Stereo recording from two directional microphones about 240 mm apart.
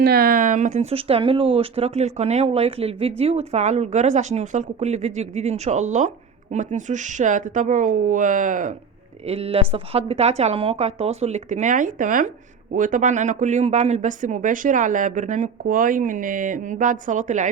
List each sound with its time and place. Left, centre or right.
0.0 s speech: right